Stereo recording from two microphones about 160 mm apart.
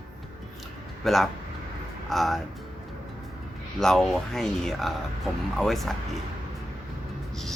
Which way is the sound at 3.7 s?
Centre (ahead or behind).